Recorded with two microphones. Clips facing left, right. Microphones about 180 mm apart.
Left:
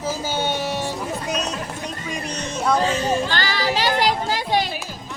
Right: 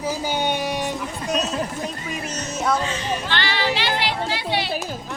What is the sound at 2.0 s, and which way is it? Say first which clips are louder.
Music: left 1 dB; 5° right (ahead or behind).